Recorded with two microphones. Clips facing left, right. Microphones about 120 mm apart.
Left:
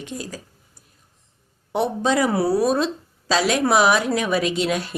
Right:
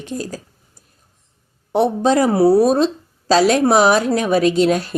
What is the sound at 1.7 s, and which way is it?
A woman's voice, 35° right (ahead or behind).